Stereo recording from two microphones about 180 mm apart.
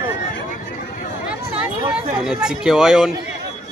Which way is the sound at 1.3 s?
5° right (ahead or behind).